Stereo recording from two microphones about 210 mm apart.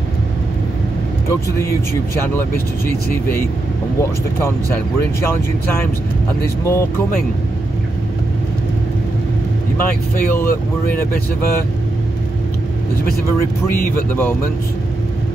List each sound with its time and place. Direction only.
2.9 s speech: 10° left (ahead or behind)
13.7 s speech: 40° left (ahead or behind)